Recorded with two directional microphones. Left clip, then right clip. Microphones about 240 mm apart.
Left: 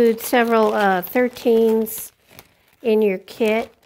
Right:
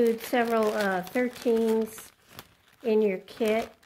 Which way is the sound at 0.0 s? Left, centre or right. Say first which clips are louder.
Left 8 dB; left.